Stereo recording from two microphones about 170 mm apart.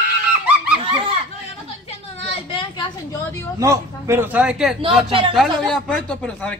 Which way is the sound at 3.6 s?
15° right (ahead or behind).